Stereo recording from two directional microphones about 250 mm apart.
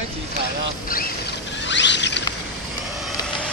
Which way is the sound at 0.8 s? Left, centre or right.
Left.